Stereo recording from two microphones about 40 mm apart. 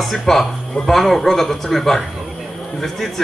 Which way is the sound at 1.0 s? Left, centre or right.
Centre.